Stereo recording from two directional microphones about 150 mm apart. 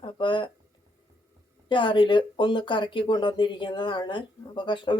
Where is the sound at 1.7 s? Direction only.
35° left (ahead or behind).